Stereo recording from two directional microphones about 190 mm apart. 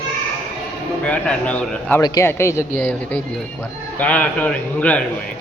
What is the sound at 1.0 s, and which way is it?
Speech, 5° left (ahead or behind).